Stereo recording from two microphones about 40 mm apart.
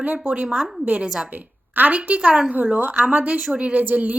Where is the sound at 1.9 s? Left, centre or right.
Right.